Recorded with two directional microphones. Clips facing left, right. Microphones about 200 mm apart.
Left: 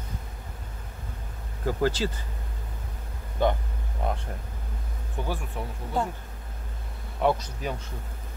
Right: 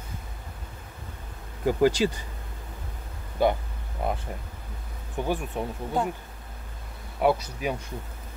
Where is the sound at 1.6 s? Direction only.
15° right (ahead or behind).